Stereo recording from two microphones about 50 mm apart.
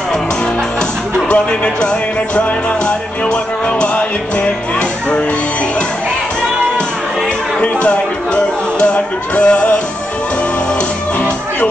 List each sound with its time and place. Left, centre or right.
1.3 s music: centre
7.6 s music: left